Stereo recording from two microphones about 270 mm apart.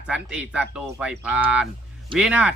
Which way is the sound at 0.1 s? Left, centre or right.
Centre.